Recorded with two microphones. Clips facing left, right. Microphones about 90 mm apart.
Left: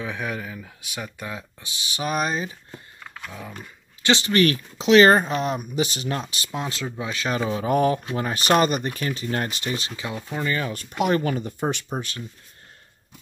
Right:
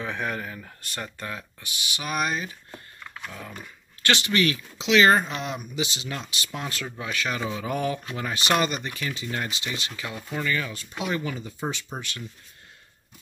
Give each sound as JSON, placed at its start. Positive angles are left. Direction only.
{"t": 0.0, "sound": "speech", "side_deg": 0}
{"t": 1.6, "sound": "speech", "side_deg": 35}
{"t": 4.0, "sound": "speech", "side_deg": 25}
{"t": 4.3, "sound": "speech", "side_deg": 45}
{"t": 6.5, "sound": "speech", "side_deg": 25}
{"t": 9.9, "sound": "speech", "side_deg": 20}
{"t": 10.7, "sound": "speech", "side_deg": 50}
{"t": 11.9, "sound": "speech", "side_deg": 45}